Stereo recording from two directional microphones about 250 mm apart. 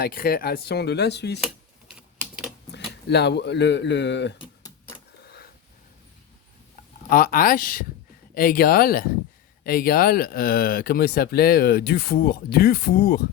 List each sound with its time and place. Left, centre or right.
0.0 s speech: left
2.7 s speech: left
5.2 s a sound: left
7.1 s speech: left